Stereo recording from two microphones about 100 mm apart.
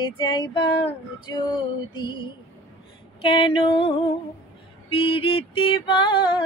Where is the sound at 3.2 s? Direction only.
65° left (ahead or behind).